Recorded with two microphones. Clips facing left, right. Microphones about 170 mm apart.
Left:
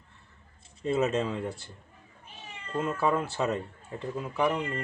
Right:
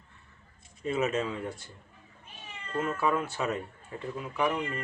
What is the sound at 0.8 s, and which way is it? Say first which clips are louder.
Speech: left 2 dB; 30° left (ahead or behind).